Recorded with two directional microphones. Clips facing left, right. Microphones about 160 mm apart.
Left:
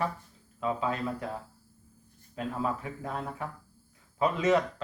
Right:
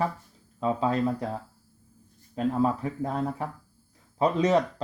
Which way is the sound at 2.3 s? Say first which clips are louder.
Right 7 dB; 35° right (ahead or behind).